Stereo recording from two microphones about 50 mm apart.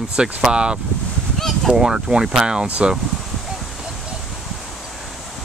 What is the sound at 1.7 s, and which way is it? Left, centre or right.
Speech, centre.